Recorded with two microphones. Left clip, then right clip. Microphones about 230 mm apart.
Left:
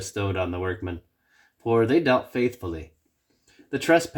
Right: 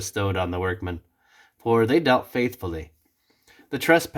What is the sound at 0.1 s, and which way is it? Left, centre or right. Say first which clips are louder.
Speech: right 2 dB; right.